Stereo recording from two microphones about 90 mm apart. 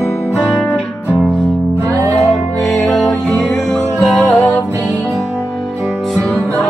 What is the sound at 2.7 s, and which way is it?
Music, centre (ahead or behind).